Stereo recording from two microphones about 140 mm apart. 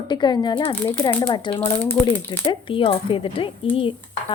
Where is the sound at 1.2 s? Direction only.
35° left (ahead or behind).